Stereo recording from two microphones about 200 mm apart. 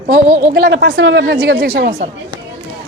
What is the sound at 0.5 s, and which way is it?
Speech, 60° right (ahead or behind).